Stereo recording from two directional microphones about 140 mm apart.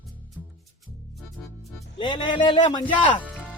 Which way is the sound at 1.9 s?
35° left (ahead or behind).